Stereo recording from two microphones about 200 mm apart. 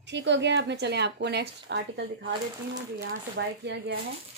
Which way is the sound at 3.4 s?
55° right (ahead or behind).